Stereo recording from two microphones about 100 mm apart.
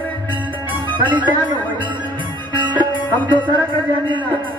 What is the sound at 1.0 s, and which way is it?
Speech, 50° right (ahead or behind).